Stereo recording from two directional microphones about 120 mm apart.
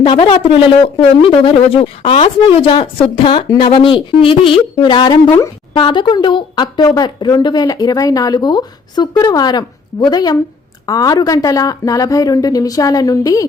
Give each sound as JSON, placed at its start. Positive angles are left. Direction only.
{"t": 0.0, "sound": "speech", "side_deg": 45}